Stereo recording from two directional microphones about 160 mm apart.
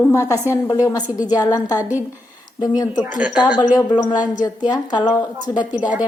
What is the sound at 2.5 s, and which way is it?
Speech, 25° left (ahead or behind).